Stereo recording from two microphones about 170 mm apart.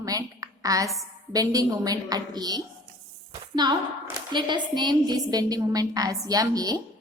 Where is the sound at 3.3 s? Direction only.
25° right (ahead or behind).